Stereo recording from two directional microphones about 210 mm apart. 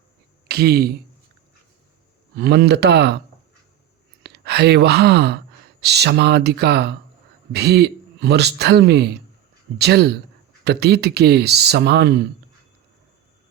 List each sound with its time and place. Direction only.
0.4 s speech: 50° right (ahead or behind)
2.3 s a man's voice: 50° right (ahead or behind)
4.2 s a man's voice: 50° right (ahead or behind)